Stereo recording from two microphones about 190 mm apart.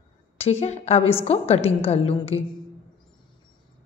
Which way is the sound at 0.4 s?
35° left (ahead or behind).